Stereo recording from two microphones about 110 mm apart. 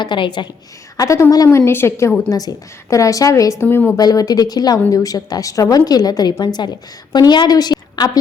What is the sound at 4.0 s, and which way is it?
A woman's voice, 35° left (ahead or behind).